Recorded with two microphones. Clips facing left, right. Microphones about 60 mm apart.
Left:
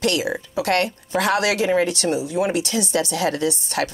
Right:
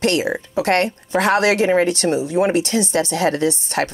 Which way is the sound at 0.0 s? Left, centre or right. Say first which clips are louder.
Right 3 dB; right.